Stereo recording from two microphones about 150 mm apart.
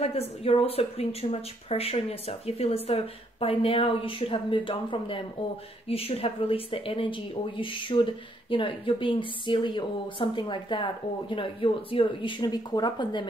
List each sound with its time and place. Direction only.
0.0 s speech: 40° left (ahead or behind)